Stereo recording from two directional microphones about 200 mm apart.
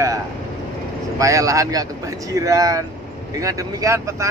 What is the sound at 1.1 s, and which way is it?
Speech, 15° right (ahead or behind).